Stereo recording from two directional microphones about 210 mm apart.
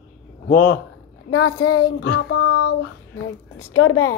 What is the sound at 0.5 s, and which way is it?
Child singing, 60° left (ahead or behind).